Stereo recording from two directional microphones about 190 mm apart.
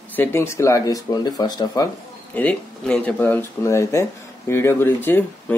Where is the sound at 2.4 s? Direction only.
5° left (ahead or behind).